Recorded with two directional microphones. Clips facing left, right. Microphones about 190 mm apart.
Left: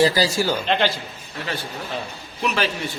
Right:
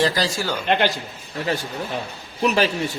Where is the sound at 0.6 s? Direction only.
15° right (ahead or behind).